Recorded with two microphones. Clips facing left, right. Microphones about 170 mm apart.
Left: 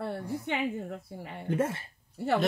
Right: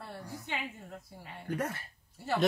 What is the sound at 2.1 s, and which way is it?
Speech, 65° left (ahead or behind).